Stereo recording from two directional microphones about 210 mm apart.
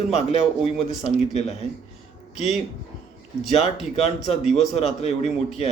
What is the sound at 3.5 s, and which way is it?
Speech, 30° left (ahead or behind).